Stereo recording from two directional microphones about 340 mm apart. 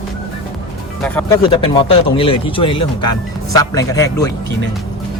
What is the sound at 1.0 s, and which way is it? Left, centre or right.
Speech, centre.